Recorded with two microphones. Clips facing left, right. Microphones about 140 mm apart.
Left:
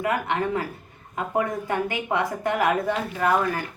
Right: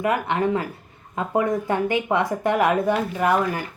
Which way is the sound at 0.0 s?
20° right (ahead or behind).